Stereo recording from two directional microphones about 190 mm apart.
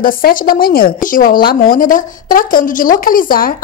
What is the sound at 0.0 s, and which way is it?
A woman's voice, 50° left (ahead or behind).